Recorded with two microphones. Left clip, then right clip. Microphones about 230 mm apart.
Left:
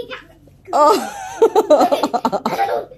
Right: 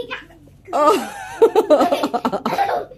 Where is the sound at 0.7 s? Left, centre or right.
Centre.